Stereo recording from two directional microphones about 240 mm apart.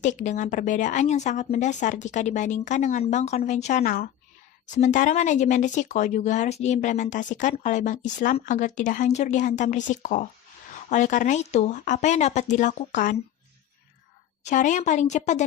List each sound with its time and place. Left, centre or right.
0.0 s speech: left
14.4 s a woman's voice: left